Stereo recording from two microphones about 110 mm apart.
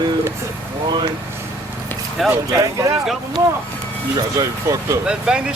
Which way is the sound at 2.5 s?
30° right (ahead or behind).